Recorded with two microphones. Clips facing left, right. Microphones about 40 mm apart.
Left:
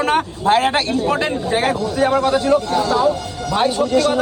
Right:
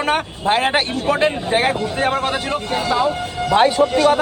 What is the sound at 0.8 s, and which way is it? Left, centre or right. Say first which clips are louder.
Speech: right 1 dB; right.